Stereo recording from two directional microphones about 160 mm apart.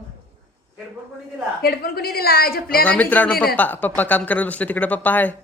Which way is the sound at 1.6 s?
75° left (ahead or behind).